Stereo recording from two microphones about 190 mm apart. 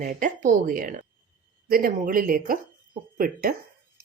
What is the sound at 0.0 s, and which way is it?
Speech, 45° right (ahead or behind).